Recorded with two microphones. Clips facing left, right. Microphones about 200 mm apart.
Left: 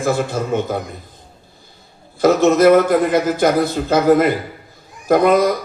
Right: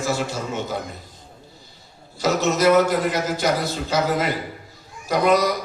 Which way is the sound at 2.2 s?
55° left (ahead or behind).